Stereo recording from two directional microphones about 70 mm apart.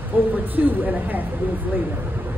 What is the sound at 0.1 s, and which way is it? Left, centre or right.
A woman's voice, right.